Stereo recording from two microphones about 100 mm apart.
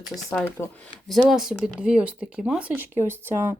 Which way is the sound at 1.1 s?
Centre (ahead or behind).